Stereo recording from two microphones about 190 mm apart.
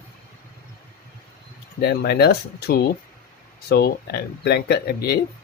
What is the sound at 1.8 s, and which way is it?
Speech, 55° left (ahead or behind).